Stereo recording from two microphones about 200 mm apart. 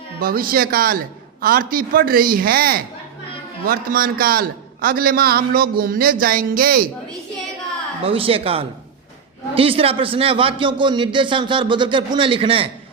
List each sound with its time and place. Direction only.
0.2 s a man's voice: 45° right (ahead or behind)
8.0 s a man's voice: 30° right (ahead or behind)